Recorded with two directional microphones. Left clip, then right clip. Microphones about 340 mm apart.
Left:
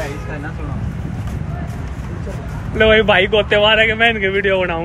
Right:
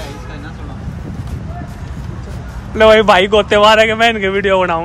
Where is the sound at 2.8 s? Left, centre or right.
Centre.